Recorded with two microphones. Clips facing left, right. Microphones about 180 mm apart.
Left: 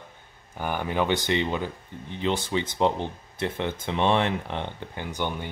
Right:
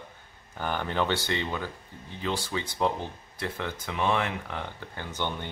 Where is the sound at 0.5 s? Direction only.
10° left (ahead or behind).